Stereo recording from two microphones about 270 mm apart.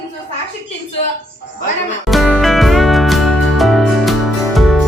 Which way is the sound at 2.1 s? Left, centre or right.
Centre.